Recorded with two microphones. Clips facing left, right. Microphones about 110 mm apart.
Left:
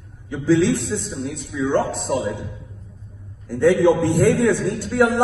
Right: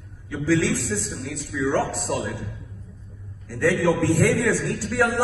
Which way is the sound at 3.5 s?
20° left (ahead or behind).